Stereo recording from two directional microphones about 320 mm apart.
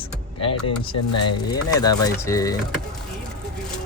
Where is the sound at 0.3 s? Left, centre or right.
Centre.